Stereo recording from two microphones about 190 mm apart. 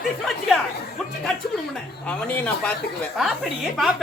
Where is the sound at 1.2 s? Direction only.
5° left (ahead or behind).